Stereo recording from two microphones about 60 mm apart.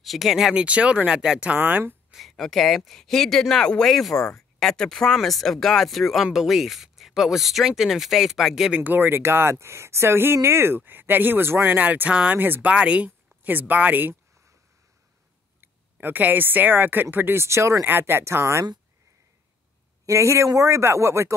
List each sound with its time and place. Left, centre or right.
0.0 s speech: centre
0.6 s speech: centre
1.6 s speech: right
2.1 s speech: centre
8.8 s speech: right
12.4 s speech: right
12.7 s speech: right
15.6 s speech: right
17.5 s speech: right
17.8 s speech: right
20.1 s speech: right